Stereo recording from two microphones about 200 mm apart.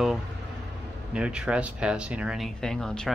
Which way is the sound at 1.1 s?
5° right (ahead or behind).